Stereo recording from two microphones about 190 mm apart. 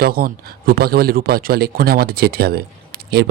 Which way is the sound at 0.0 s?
50° right (ahead or behind).